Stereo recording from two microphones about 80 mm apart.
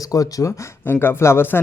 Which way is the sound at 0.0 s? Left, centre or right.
Left.